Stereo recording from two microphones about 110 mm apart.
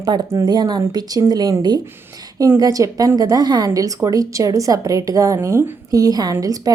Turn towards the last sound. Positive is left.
turn(degrees=-30)  # may be behind; listen again after turning